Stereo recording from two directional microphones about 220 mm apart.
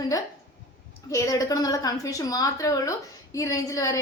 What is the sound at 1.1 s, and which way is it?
A woman's voice, 15° left (ahead or behind).